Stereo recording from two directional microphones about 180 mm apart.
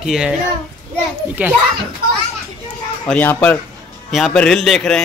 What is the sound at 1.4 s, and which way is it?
Speech, 10° right (ahead or behind).